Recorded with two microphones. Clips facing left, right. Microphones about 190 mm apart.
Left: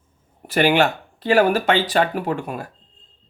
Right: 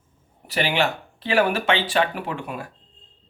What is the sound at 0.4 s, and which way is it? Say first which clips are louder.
Speech: left 6 dB; 50° left (ahead or behind).